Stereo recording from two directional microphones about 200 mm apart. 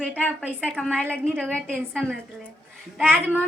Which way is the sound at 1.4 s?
5° left (ahead or behind).